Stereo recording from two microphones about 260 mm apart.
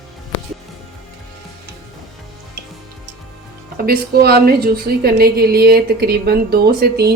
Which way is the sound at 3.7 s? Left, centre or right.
Right.